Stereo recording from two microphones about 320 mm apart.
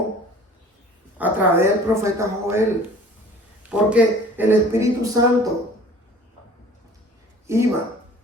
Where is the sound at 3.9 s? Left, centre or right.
Centre.